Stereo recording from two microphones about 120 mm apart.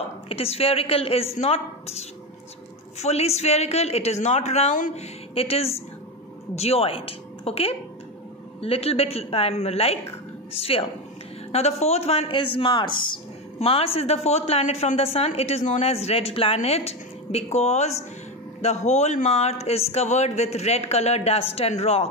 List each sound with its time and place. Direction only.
0.3 s a man's voice: 55° left (ahead or behind); by 5.0 s 80° left
5.3 s a woman's voice: 55° left (ahead or behind)
11.5 s a man's voice: 65° left (ahead or behind); by 13.2 s 40° left (ahead or behind)
13.6 s a woman's voice: 55° left (ahead or behind)